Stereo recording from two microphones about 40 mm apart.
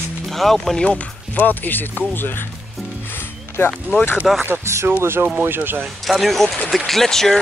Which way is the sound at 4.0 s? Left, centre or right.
Left.